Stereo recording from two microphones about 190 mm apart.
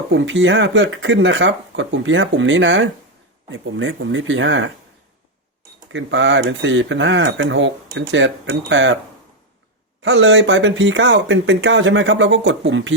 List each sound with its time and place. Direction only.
0.1 s speech: 80° right
5.9 s speech: 75° right (ahead or behind)
10.0 s speech: 75° right (ahead or behind)